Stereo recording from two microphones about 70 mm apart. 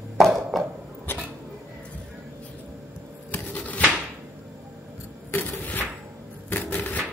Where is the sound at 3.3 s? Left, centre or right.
Left.